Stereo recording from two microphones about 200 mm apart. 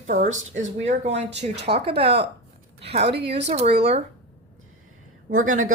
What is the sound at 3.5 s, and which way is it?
Speech, 30° right (ahead or behind).